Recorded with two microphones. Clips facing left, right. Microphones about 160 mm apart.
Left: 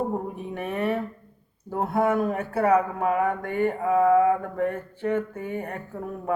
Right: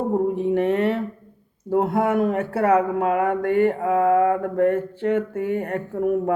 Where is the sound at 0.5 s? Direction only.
75° right (ahead or behind).